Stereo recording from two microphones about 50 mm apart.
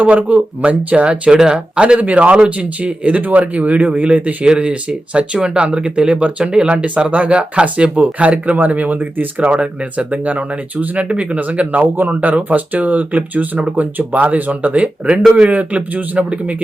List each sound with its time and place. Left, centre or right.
0.0 s speech: right
4.4 s speech: right
6.8 s speech: right
9.5 s speech: right